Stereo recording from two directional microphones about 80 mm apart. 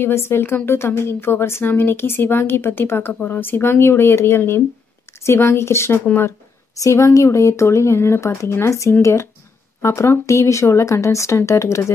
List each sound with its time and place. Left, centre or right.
0.0 s a woman's voice: left